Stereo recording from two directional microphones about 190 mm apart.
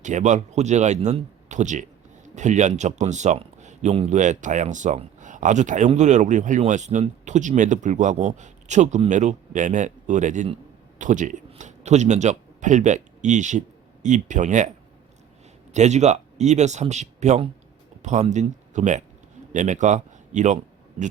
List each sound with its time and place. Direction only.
0.0 s speech: 40° right (ahead or behind)
15.7 s a man's voice: 35° right (ahead or behind)